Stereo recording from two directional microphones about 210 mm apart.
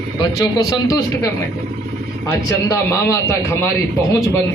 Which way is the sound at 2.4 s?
15° left (ahead or behind).